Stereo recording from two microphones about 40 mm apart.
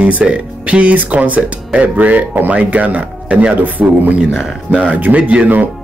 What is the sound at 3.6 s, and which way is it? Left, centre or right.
Speech, right.